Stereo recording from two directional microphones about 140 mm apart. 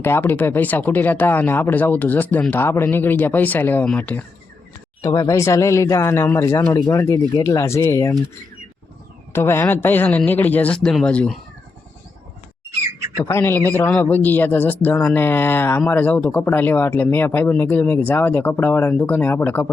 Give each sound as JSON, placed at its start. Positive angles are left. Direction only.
{"t": 0.0, "sound": "speech", "side_deg": 15}
{"t": 5.0, "sound": "a man's voice", "side_deg": 25}
{"t": 9.3, "sound": "speech", "side_deg": 15}
{"t": 13.2, "sound": "speech", "side_deg": 15}